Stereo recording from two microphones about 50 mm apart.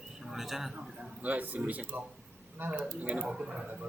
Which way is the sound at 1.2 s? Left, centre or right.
Right.